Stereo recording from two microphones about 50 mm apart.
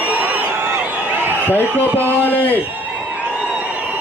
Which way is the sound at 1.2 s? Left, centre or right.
Left.